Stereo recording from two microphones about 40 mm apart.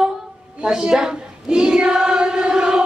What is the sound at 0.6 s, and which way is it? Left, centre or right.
Choir, centre.